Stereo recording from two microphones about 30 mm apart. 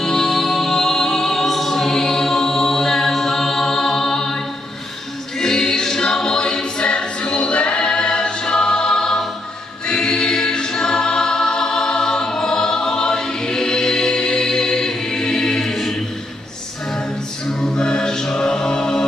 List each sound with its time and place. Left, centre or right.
0.0 s music: centre
5.4 s choir: centre
15.7 s choir: centre
17.4 s a capella: left